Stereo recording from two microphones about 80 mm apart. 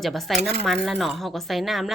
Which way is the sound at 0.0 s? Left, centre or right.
Centre.